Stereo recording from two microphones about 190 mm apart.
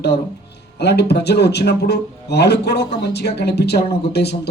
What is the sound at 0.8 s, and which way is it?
A man's voice, 60° left (ahead or behind).